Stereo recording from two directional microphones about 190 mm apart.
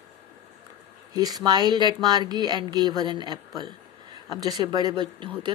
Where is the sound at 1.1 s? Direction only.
20° right (ahead or behind).